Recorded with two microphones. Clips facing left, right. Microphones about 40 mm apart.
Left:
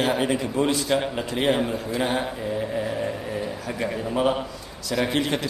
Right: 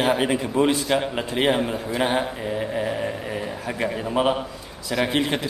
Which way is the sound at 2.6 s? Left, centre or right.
Centre.